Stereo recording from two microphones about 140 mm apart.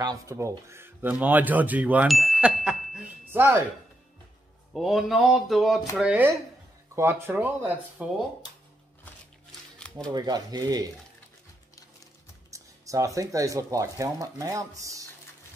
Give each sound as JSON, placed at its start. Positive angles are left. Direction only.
{"t": 0.0, "sound": "speech", "side_deg": -25}
{"t": 2.0, "sound": "a sound", "side_deg": 0}
{"t": 3.3, "sound": "speech", "side_deg": -15}
{"t": 4.7, "sound": "mantra", "side_deg": 0}
{"t": 5.9, "sound": "speech", "side_deg": -10}
{"t": 9.8, "sound": "shuffling cards", "side_deg": 5}
{"t": 10.1, "sound": "speech", "side_deg": -30}
{"t": 12.4, "sound": "speech", "side_deg": -20}